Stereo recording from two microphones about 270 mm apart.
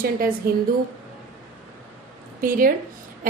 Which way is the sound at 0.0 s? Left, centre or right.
Right.